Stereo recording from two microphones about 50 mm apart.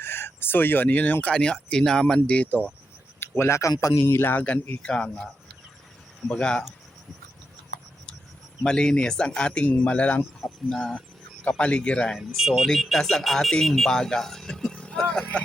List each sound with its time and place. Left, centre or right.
0.0 s speech: left
1.3 s speech: centre
3.2 s speech: left
4.0 s a man's voice: left
4.4 s speech: left
8.6 s speech: centre
11.4 s speech: left
12.1 s speech: centre; by 15.4 s left